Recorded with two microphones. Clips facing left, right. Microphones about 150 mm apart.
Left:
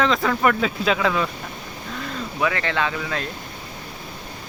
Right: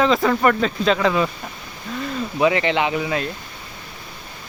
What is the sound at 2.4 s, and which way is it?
Speech, 20° right (ahead or behind).